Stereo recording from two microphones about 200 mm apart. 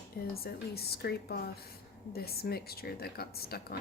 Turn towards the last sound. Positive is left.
turn(degrees=50)  # may be behind; listen again after turning